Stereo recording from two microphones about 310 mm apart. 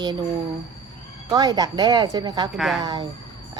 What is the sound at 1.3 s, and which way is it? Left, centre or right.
Speech, centre.